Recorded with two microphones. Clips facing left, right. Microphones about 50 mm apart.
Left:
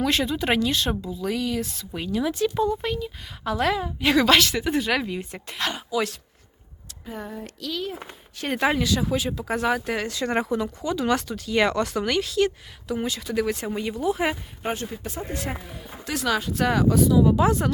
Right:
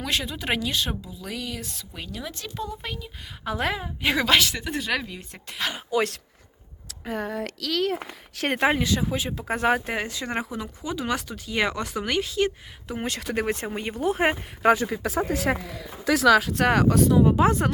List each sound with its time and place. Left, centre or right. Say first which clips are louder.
0.0 s speech: left 5 dB; centre
2.6 s speech: left 9 dB; centre
3.4 s speech: left 4 dB; centre
5.5 s speech: left 1 dB; centre
5.9 s speech: right 3 dB; right
7.0 s speech: right 5 dB; right
8.5 s speech: left 1 dB; right
9.8 s speech: left 3 dB; centre
10.3 s speech: left 7 dB; centre; by 12.5 s right
13.1 s speech: right 2 dB; right
13.4 s speech: left 3 dB; right
14.6 s speech: right 11 dB; right
16.5 s speech: right 1 dB; right